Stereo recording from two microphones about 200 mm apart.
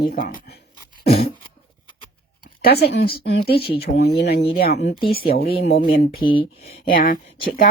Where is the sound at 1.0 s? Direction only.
30° left (ahead or behind).